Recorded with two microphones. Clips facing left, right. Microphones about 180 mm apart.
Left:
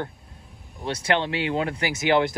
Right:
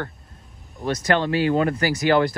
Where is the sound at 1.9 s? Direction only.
20° left (ahead or behind).